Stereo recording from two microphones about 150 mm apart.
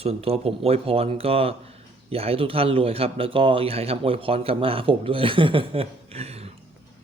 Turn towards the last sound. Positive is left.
turn(degrees=-45)  # may be behind; listen again after turning